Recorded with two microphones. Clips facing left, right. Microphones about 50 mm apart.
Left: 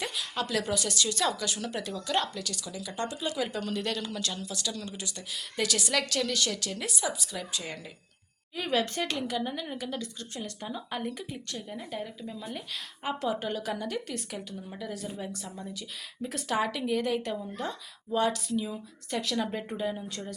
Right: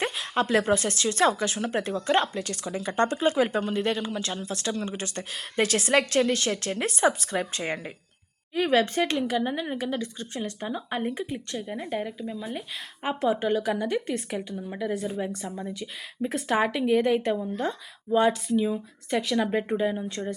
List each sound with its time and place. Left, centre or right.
0.0 s speech: right
12.4 s speech: centre
13.0 s speech: right